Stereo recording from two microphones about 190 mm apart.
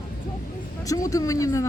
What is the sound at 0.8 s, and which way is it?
Speech, 15° left (ahead or behind).